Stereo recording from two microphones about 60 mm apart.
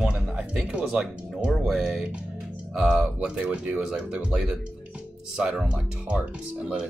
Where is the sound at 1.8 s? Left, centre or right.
Centre.